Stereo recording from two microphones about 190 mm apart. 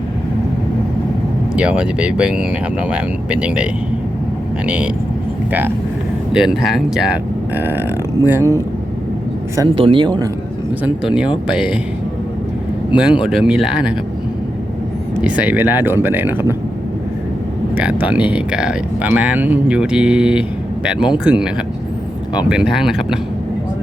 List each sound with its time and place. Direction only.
1.5 s speech: 5° right (ahead or behind)
9.7 s speech: 25° right (ahead or behind)
10.8 s speech: 5° right (ahead or behind)
12.9 s a man's voice: 5° right (ahead or behind)
15.2 s speech: 5° right (ahead or behind)
17.7 s speech: 5° right (ahead or behind)